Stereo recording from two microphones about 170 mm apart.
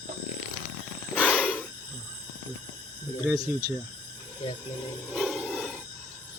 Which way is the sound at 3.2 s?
20° right (ahead or behind).